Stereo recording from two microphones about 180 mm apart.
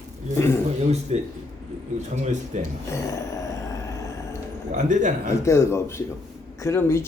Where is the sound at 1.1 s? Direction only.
35° right (ahead or behind).